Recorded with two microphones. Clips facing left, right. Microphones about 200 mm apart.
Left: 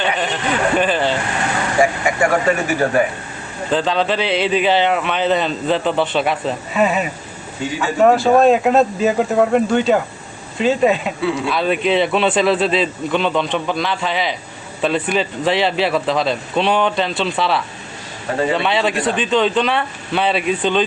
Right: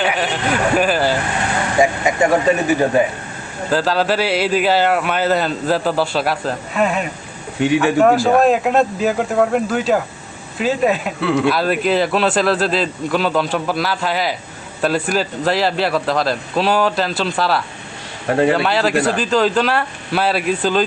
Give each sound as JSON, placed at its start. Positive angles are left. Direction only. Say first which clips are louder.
{"t": 0.0, "sound": "speech", "louder": "right 1 dB", "side_deg": -5}
{"t": 1.8, "sound": "speech", "louder": "right 1 dB", "side_deg": -20}
{"t": 3.7, "sound": "speech", "louder": "right 1 dB", "side_deg": -5}
{"t": 7.6, "sound": "a man's voice", "louder": "right 7 dB", "side_deg": -65}
{"t": 8.0, "sound": "speech", "louder": "left 5 dB", "side_deg": 0}
{"t": 11.2, "sound": "speech", "louder": "right 4 dB", "side_deg": -65}
{"t": 11.5, "sound": "speech", "louder": "even", "side_deg": -5}